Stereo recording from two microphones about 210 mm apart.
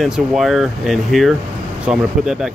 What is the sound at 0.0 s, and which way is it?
Speech, centre (ahead or behind).